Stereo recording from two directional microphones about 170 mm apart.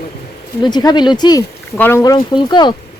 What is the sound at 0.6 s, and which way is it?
Speech, 25° left (ahead or behind).